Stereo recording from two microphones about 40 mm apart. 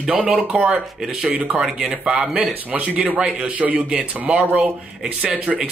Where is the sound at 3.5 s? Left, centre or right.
Right.